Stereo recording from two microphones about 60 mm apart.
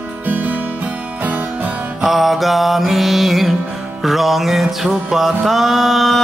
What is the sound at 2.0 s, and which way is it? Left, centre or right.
Music, centre.